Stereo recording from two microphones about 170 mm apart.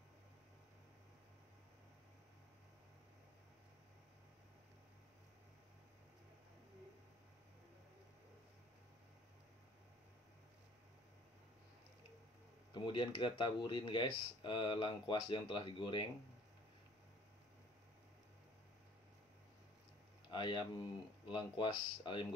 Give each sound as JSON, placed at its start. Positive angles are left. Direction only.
{"t": 12.7, "sound": "speech", "side_deg": 30}
{"t": 20.2, "sound": "speech", "side_deg": 25}